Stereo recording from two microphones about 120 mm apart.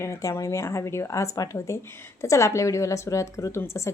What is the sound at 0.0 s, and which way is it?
A woman's voice, 25° left (ahead or behind).